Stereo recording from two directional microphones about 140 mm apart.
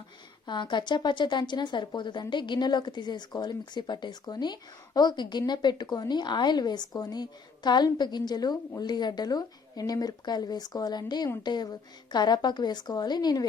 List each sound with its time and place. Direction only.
0.4 s a woman's voice: 35° left (ahead or behind)